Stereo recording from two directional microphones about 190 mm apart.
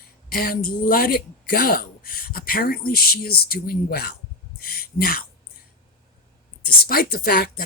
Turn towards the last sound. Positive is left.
turn(degrees=50)  # may be behind; listen again after turning